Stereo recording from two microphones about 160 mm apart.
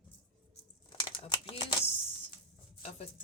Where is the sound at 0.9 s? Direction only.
30° left (ahead or behind).